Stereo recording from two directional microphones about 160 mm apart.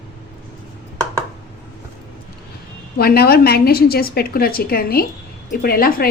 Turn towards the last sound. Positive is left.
turn(degrees=65)  # may be behind; listen again after turning